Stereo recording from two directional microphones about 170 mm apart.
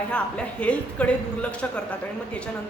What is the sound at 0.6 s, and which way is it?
A woman's voice, 10° left (ahead or behind).